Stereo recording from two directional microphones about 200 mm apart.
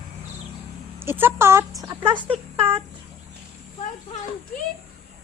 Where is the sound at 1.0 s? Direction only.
10° right (ahead or behind).